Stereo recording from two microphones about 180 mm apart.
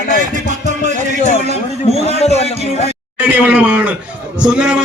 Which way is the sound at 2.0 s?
35° left (ahead or behind).